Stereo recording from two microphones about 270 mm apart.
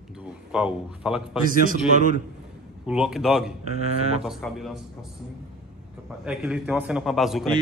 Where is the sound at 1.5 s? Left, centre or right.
Right.